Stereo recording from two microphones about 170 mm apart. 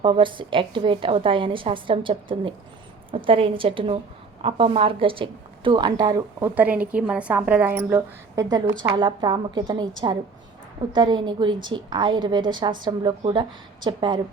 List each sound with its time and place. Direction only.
0.0 s a woman's voice: 30° right (ahead or behind)
6.5 s a woman's voice: 10° right (ahead or behind); by 9.9 s 25° right (ahead or behind)
10.9 s a woman's voice: 25° right (ahead or behind)